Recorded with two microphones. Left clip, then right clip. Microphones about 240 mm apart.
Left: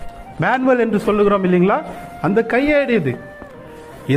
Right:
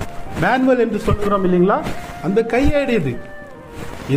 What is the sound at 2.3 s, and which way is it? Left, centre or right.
Speech, left.